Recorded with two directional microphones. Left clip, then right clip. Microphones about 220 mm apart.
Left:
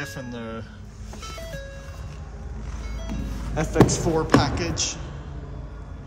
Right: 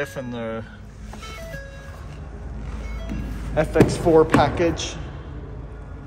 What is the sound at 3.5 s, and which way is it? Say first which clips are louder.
A woman's voice: right 2 dB; 15° left (ahead or behind).